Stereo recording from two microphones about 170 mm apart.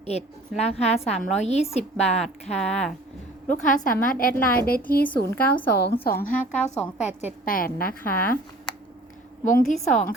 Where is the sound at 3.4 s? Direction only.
50° left (ahead or behind).